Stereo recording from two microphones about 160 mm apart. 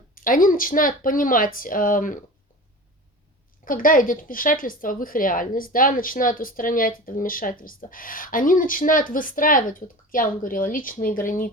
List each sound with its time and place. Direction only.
0.1 s speech: 60° left (ahead or behind)
3.6 s speech: 60° left (ahead or behind)